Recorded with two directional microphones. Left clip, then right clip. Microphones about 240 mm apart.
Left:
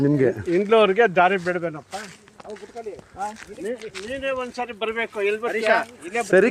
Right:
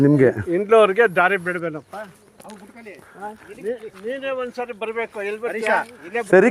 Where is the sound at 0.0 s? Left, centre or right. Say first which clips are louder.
Right 4 dB; right.